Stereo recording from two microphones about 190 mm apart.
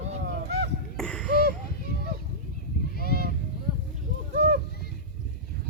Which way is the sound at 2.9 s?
50° left (ahead or behind).